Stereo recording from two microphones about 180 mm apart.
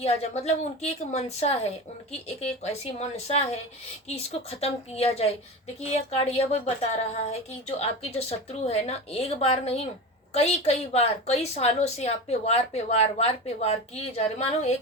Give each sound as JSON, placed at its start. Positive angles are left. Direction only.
{"t": 0.0, "sound": "a woman's voice", "side_deg": 35}
{"t": 7.8, "sound": "a woman's voice", "side_deg": 35}